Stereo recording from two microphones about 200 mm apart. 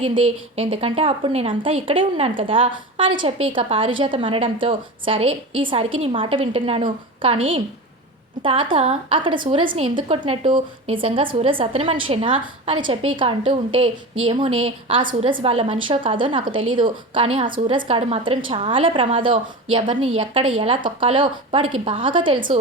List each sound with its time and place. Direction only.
0.0 s a woman's voice: 30° right (ahead or behind)